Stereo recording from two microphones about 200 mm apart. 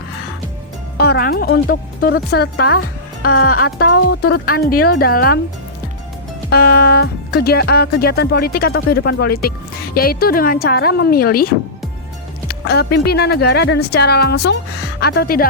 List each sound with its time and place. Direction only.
0.9 s speech: 50° left (ahead or behind)
6.5 s speech: 50° left (ahead or behind)